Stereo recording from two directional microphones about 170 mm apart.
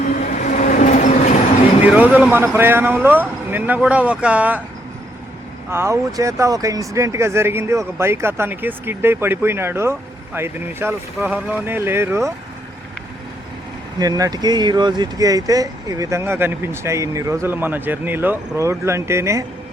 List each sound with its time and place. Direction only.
0.1 s train: 50° left (ahead or behind)
1.8 s speech: 10° right (ahead or behind)
5.7 s speech: 15° right (ahead or behind)
14.0 s speech: 20° right (ahead or behind)